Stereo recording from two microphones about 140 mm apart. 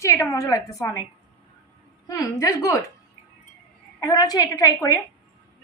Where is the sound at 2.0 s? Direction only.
25° left (ahead or behind).